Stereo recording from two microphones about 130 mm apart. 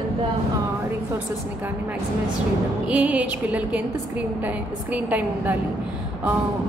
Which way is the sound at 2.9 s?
10° right (ahead or behind).